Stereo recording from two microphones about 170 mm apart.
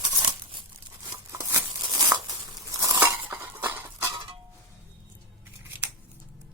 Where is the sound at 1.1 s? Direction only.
20° right (ahead or behind).